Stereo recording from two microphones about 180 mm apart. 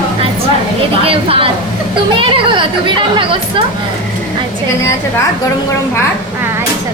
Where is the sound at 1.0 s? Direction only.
30° right (ahead or behind).